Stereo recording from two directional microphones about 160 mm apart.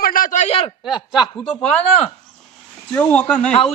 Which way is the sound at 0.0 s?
60° left (ahead or behind).